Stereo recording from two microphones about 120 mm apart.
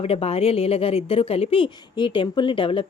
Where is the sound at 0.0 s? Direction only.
55° left (ahead or behind).